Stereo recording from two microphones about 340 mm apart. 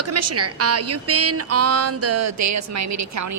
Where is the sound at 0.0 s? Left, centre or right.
Right.